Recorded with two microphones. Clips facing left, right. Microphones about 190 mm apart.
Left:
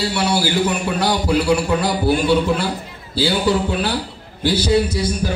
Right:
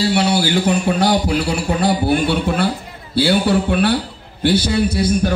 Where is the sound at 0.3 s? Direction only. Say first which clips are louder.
Right 2 dB; 55° right (ahead or behind).